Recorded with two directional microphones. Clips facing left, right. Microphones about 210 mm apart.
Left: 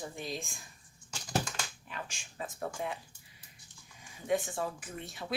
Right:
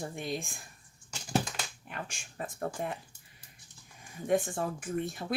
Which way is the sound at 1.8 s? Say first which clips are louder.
Right 2 dB; 55° right (ahead or behind).